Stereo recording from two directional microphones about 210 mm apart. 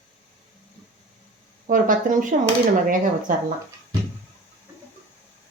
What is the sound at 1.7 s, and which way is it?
Speech, 40° right (ahead or behind).